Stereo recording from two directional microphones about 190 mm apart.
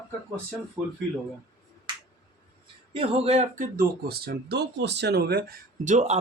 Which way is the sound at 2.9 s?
30° right (ahead or behind).